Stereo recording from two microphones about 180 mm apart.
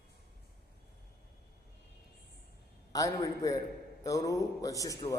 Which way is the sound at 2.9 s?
20° left (ahead or behind).